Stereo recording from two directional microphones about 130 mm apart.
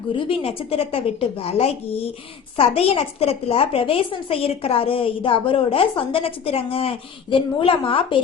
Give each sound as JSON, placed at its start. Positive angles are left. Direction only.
{"t": 0.1, "sound": "a woman's voice", "side_deg": 45}